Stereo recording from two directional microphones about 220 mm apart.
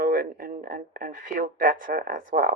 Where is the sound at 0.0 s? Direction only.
40° right (ahead or behind).